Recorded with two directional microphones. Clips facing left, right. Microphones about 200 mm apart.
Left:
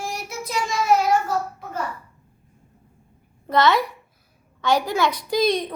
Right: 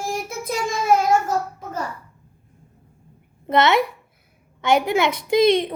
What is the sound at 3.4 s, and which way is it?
A woman's voice, 25° right (ahead or behind).